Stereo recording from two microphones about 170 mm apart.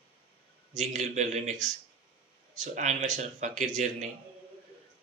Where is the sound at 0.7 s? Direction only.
45° right (ahead or behind).